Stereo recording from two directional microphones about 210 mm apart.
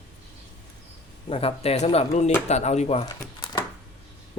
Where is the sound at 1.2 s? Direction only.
25° left (ahead or behind).